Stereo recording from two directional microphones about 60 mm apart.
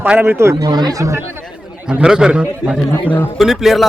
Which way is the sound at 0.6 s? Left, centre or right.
Right.